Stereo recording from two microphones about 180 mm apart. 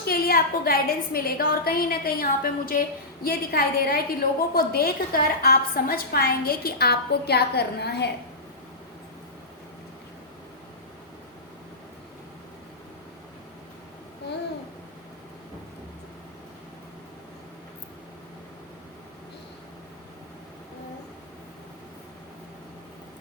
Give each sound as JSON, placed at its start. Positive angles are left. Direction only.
{"t": 0.1, "sound": "a woman's voice", "side_deg": 55}